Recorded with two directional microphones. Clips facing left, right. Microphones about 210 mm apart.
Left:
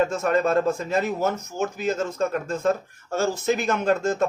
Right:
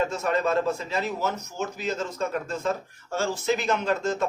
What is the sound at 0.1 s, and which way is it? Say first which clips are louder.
A man's voice: left 4 dB; 50° left (ahead or behind).